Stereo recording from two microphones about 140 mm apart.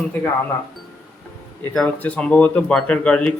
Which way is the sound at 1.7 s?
5° left (ahead or behind).